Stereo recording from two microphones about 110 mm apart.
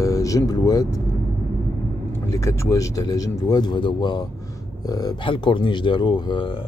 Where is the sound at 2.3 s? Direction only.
25° left (ahead or behind).